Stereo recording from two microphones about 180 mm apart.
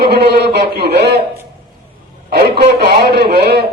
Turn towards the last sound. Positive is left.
turn(degrees=-65)  # may be behind; listen again after turning